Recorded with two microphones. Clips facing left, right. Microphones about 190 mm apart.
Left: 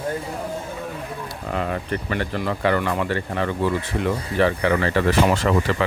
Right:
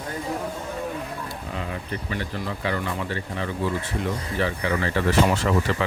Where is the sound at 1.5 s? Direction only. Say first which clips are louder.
Left 8 dB; 60° left (ahead or behind).